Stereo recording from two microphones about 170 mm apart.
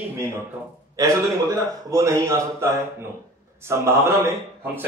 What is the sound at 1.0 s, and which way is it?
A man's voice, 20° right (ahead or behind).